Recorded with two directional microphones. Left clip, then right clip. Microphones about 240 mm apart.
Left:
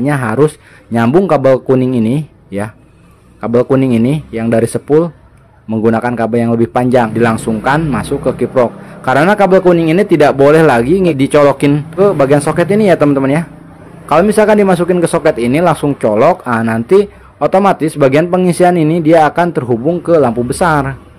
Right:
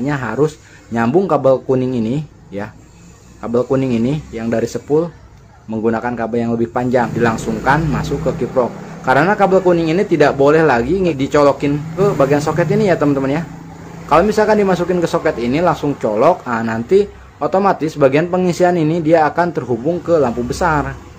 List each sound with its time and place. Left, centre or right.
0.0 s a man's voice: left